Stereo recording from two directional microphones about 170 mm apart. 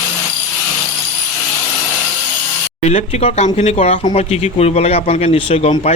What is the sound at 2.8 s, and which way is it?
Speech, 40° left (ahead or behind).